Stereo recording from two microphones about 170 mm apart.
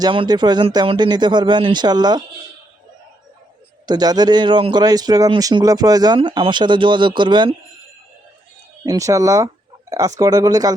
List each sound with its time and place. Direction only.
0.0 s speech: 25° right (ahead or behind)
3.8 s speech: 25° right (ahead or behind)
8.8 s speech: 20° right (ahead or behind)